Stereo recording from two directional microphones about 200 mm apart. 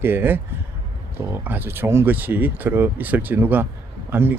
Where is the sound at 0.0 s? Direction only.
10° right (ahead or behind).